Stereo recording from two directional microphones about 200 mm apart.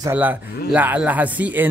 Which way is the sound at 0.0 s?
10° right (ahead or behind).